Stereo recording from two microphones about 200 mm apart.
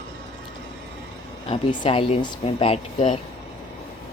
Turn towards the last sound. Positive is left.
turn(degrees=30)  # may be behind; listen again after turning